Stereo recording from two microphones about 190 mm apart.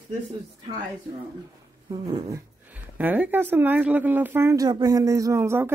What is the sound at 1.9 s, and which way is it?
Dog, 20° right (ahead or behind).